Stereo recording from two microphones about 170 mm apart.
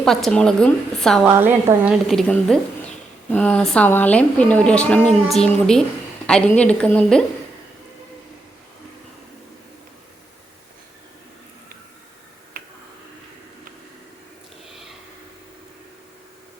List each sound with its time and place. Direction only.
0.0 s speech: centre (ahead or behind)
1.4 s speech: 10° right (ahead or behind)
12.6 s finger snapping: 55° right (ahead or behind)